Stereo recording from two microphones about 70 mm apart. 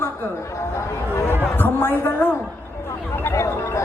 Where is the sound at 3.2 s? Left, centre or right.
Left.